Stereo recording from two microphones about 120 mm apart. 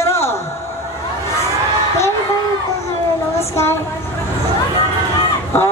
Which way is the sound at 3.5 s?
20° left (ahead or behind).